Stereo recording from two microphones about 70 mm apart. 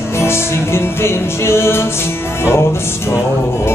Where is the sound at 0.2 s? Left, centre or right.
Left.